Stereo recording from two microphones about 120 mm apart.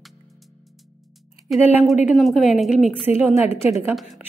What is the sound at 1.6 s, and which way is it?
Speech, 15° right (ahead or behind).